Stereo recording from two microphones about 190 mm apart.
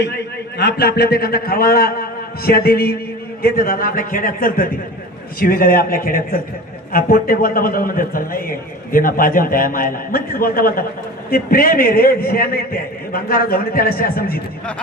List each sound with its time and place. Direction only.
0.6 s a man's voice: 60° left (ahead or behind)